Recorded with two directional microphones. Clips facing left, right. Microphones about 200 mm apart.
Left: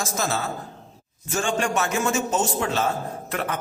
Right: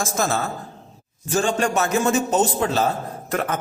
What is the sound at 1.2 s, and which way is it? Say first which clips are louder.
A man's voice: right 4 dB; 35° right (ahead or behind).